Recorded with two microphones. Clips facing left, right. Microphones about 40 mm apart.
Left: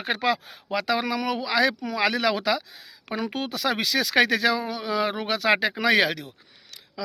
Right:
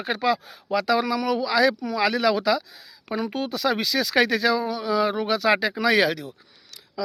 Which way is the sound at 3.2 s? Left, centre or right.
Left.